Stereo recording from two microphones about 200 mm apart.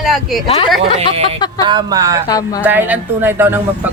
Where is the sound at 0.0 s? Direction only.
Centre (ahead or behind).